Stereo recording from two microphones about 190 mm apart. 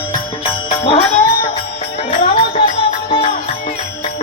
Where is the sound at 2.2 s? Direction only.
25° left (ahead or behind).